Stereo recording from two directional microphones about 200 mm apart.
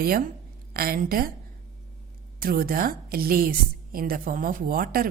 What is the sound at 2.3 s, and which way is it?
A woman's voice, 45° right (ahead or behind).